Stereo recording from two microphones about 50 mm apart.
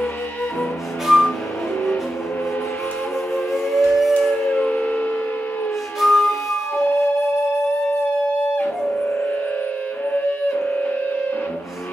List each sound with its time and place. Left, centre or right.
1.0 s music: centre
3.5 s a sound: centre
4.6 s siren: left
5.9 s flute: centre
10.1 s music: left